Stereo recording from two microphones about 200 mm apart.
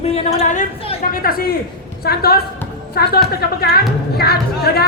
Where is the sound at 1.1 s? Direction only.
45° left (ahead or behind).